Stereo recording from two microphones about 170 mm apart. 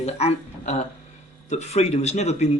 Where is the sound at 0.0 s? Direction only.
40° left (ahead or behind).